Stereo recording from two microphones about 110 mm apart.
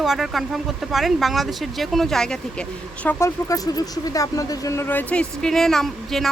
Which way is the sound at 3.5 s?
35° left (ahead or behind).